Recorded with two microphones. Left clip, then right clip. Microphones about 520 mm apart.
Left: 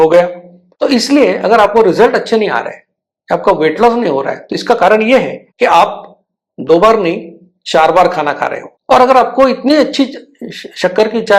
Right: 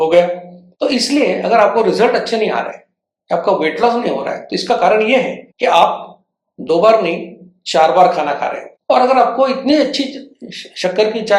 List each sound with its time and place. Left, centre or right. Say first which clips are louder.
0.8 s a woman's voice: left 5 dB; left